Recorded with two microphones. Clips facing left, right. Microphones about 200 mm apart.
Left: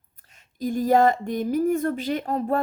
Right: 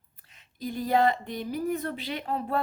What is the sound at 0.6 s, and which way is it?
Speech, 45° left (ahead or behind).